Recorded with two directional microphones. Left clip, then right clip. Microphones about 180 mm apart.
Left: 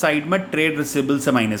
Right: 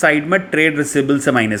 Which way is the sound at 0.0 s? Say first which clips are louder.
Right 5 dB; 10° right (ahead or behind).